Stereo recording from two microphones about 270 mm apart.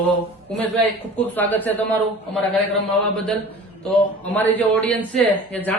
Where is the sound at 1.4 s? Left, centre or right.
Centre.